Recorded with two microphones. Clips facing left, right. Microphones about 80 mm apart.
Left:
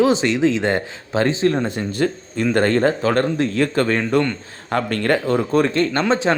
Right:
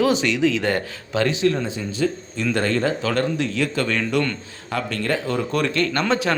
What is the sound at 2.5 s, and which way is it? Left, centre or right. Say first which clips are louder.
Speech: left 5 dB; left.